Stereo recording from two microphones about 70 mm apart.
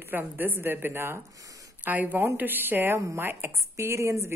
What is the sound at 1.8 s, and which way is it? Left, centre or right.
Speech, right.